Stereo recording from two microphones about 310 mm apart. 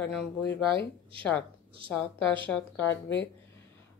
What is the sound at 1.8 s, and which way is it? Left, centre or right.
Speech, centre.